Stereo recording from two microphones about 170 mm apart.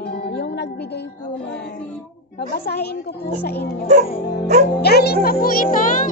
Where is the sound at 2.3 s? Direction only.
70° left (ahead or behind).